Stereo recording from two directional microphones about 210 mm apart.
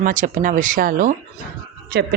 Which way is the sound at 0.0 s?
40° right (ahead or behind).